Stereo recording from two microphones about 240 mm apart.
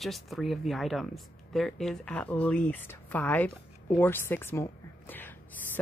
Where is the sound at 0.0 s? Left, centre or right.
Centre.